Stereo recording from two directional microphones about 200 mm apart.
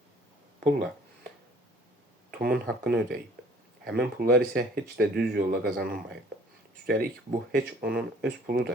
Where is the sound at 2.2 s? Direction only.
50° right (ahead or behind).